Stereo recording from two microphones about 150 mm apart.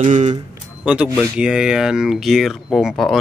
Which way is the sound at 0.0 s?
50° right (ahead or behind).